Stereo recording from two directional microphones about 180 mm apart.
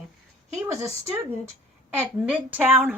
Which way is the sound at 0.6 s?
15° right (ahead or behind).